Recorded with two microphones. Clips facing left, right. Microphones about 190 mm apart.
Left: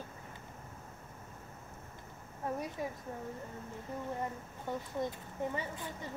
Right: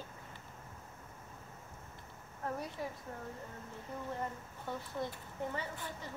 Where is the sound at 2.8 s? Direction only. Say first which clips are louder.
Left 2 dB; 15° left (ahead or behind).